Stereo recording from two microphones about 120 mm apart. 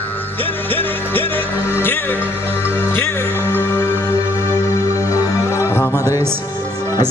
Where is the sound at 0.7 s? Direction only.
15° left (ahead or behind).